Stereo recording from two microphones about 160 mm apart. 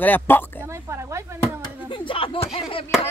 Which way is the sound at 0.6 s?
15° right (ahead or behind).